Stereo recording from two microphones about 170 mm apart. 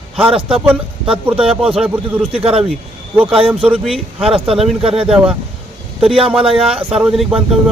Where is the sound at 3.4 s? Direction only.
35° right (ahead or behind).